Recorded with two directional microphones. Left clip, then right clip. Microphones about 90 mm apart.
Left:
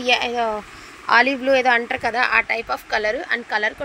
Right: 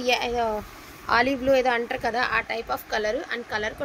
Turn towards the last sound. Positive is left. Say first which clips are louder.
# left 7 dB
turn(degrees=35)  # may be behind; listen again after turning